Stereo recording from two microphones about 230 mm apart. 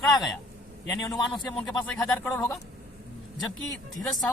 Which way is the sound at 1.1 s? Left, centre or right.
Centre.